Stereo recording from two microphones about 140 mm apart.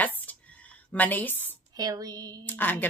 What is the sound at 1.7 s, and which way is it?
Speech, 30° right (ahead or behind).